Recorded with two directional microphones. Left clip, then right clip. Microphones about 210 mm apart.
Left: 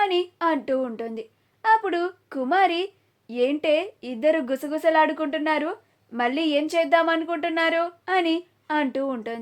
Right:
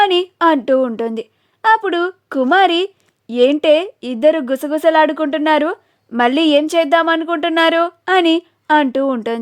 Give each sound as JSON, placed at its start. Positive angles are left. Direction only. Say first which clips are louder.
{"t": 0.0, "sound": "a woman's voice", "louder": "right 10 dB", "side_deg": -45}